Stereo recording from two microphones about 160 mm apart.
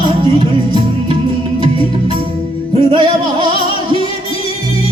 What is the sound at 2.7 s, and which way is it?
Music, 30° right (ahead or behind).